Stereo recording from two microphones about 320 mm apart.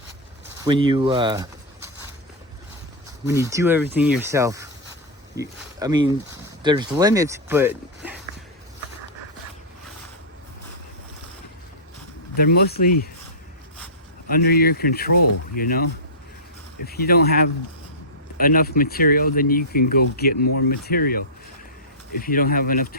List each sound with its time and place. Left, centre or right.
0.6 s speech: centre
3.2 s speech: centre
12.4 s speech: left
14.3 s speech: left